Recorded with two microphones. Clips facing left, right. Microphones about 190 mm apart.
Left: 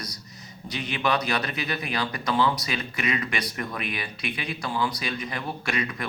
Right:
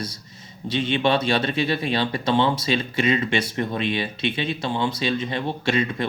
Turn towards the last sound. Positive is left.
turn(degrees=-25)  # may be behind; listen again after turning